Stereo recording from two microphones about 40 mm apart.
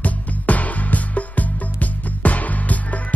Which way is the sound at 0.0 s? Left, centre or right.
Left.